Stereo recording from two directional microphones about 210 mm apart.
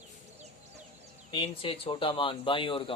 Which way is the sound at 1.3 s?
25° left (ahead or behind).